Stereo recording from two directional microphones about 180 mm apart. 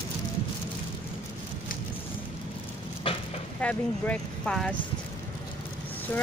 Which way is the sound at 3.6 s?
5° left (ahead or behind).